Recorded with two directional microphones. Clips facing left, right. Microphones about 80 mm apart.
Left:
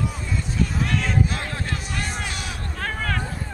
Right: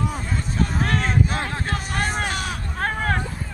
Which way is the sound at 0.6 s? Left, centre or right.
Right.